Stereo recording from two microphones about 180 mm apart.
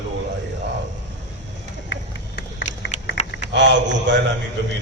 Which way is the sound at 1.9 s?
60° left (ahead or behind).